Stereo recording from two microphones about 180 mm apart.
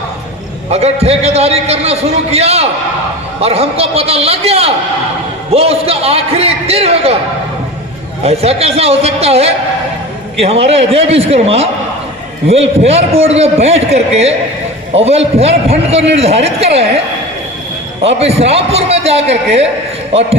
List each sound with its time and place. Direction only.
0.7 s a man's voice: 35° right (ahead or behind)
8.2 s a man's voice: 35° right (ahead or behind)
18.2 s a man's voice: 35° right (ahead or behind)